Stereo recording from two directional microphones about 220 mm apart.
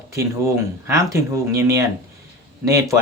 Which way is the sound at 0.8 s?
15° right (ahead or behind).